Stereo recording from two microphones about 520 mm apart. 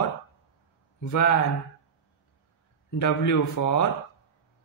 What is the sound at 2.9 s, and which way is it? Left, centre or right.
Speech, left.